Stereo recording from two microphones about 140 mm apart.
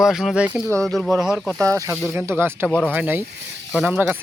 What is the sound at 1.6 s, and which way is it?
Speech, 20° right (ahead or behind).